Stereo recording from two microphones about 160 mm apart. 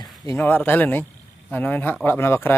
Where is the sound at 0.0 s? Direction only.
25° left (ahead or behind).